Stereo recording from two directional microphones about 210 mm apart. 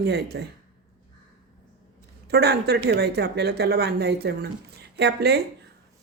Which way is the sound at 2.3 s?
50° right (ahead or behind).